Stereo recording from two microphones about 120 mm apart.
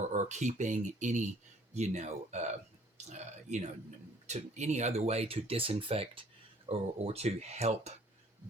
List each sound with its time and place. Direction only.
0.1 s speech: 80° right
1.7 s speech: 70° right (ahead or behind)